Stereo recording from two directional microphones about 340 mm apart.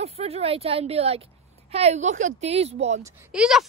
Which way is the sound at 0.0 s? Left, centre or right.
Centre.